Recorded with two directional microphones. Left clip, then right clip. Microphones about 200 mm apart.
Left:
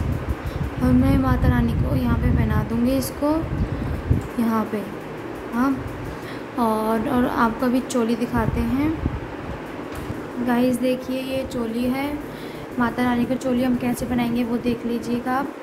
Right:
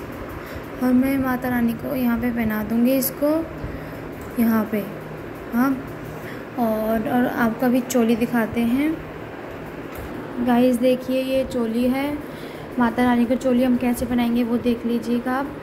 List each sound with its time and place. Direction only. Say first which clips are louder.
0.8 s a woman's voice: even; centre (ahead or behind)
4.4 s a woman's voice: right 3 dB; centre (ahead or behind)
6.6 s a woman's voice: left 1 dB; 10° left (ahead or behind)
10.5 s a woman's voice: right 3 dB; 10° right (ahead or behind)